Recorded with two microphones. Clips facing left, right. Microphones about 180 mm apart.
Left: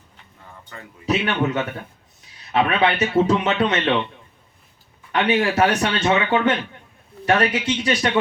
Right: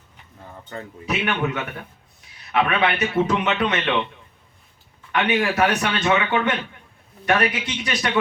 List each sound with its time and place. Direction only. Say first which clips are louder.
0.7 s a man's voice: right 7 dB; 30° right (ahead or behind)
1.0 s speech: left 3 dB; 30° left (ahead or behind)
2.5 s speech: left 2 dB; 30° left (ahead or behind)
5.1 s speech: left 2 dB; 30° left (ahead or behind)